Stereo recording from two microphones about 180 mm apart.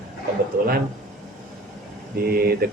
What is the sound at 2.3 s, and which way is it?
Speech, 55° right (ahead or behind).